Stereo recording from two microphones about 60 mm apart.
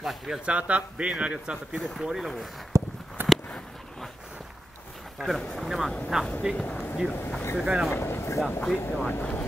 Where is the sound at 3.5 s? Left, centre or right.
Centre.